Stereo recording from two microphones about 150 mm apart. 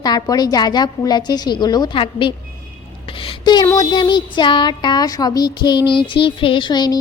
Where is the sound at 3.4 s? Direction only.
30° left (ahead or behind).